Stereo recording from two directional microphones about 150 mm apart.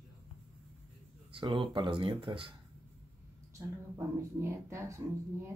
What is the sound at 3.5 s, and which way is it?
Speech, 15° right (ahead or behind).